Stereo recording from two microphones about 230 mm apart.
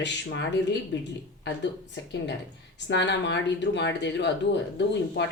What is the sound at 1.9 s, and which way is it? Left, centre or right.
Speech, left.